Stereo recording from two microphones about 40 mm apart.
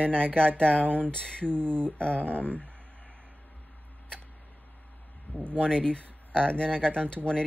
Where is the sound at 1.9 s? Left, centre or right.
Left.